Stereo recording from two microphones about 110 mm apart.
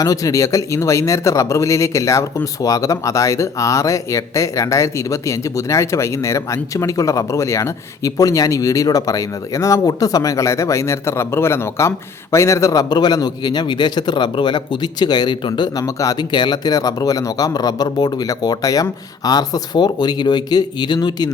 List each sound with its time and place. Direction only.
0.0 s speech: 30° left (ahead or behind)